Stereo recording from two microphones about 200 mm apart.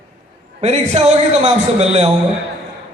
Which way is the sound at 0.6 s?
30° right (ahead or behind).